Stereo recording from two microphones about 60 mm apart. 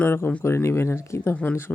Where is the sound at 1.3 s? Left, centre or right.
Left.